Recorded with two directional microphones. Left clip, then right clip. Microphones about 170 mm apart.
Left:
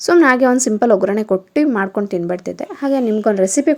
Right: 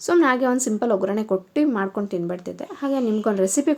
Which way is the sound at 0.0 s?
35° left (ahead or behind).